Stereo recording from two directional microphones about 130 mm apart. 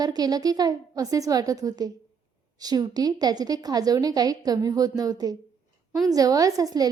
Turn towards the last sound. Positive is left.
turn(degrees=-30)  # may be behind; listen again after turning